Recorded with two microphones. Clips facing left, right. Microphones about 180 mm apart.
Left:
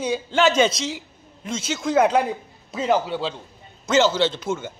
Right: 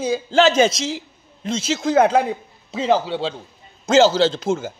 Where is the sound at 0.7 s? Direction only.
90° right.